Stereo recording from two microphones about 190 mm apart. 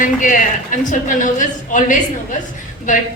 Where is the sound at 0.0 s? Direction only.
45° left (ahead or behind).